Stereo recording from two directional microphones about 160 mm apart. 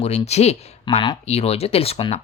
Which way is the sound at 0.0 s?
45° left (ahead or behind).